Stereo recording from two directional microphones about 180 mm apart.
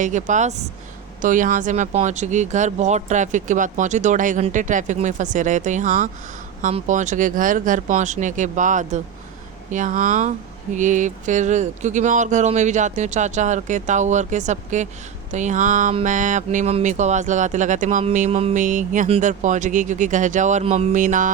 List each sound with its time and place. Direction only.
0.0 s speech: 45° right (ahead or behind)